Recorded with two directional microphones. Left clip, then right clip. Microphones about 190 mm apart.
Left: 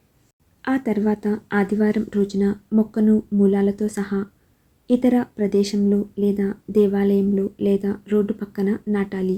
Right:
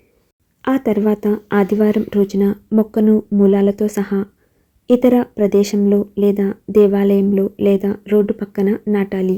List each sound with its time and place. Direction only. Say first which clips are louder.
0.6 s speech: right 6 dB; 15° right (ahead or behind)